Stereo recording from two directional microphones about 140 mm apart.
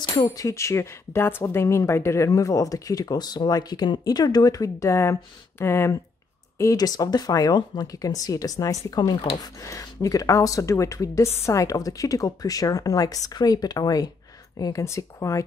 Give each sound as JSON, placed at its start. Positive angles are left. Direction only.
{"t": 0.0, "sound": "speech", "side_deg": 30}